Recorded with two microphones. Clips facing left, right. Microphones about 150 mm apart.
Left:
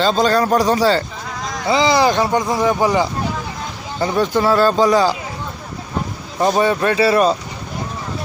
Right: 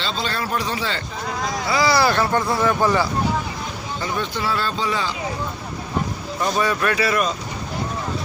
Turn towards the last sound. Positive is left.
turn(degrees=30)  # may be behind; listen again after turning